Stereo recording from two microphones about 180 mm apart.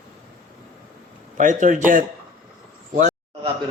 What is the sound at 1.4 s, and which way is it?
Speech, 45° right (ahead or behind).